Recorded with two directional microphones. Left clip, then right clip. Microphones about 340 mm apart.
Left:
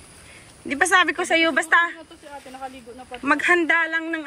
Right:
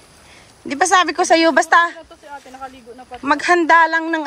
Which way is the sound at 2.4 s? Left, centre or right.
Right.